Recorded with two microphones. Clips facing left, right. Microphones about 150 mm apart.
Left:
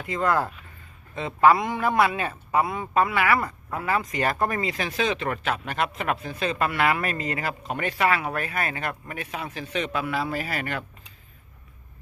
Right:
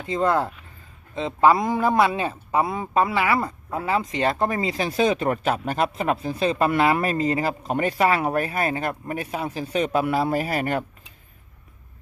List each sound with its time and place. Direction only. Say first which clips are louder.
0.0 s speech: right 2 dB; 25° right (ahead or behind)
1.5 s speech: right 4 dB; 35° right (ahead or behind)
2.0 s speech: right 2 dB; 25° right (ahead or behind); by 10.8 s 40° right (ahead or behind)